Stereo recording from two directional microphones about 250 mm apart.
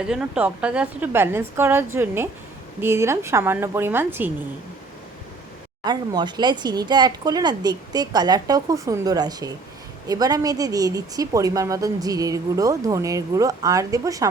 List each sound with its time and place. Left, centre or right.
0.0 s a woman's voice: centre
5.8 s a woman's voice: centre